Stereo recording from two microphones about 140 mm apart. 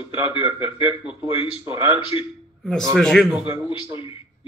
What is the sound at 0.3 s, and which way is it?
A man's voice, 35° left (ahead or behind).